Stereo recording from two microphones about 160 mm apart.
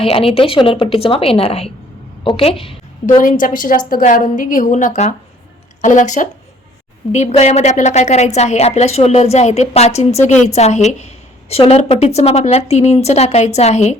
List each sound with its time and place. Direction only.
0.0 s a woman's voice: 35° left (ahead or behind)
3.2 s a woman's voice: 60° left (ahead or behind)